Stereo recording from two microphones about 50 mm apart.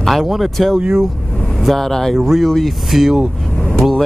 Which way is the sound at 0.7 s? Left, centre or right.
Centre.